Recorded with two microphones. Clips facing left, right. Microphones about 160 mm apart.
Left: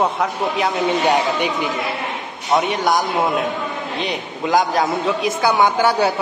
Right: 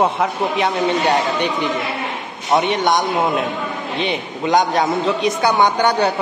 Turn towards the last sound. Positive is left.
turn(degrees=5)  # may be behind; listen again after turning